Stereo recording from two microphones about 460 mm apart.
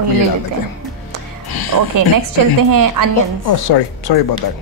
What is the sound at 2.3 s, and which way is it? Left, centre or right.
Speech, right.